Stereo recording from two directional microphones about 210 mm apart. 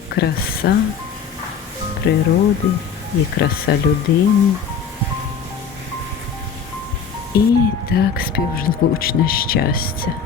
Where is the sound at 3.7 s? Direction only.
50° left (ahead or behind).